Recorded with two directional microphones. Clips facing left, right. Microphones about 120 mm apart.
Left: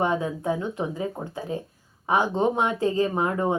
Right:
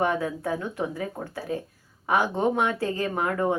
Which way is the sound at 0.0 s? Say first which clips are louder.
Left 1 dB; 20° left (ahead or behind).